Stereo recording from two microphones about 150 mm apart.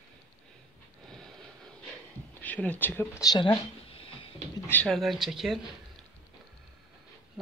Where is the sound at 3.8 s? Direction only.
40° left (ahead or behind).